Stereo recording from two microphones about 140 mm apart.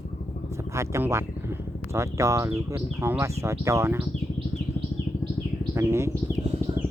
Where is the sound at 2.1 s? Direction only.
20° right (ahead or behind).